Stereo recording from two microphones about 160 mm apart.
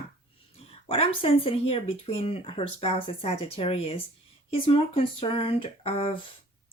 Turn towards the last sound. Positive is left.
turn(degrees=35)  # may be behind; listen again after turning